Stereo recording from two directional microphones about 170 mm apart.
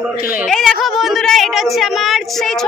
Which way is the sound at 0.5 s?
Centre (ahead or behind).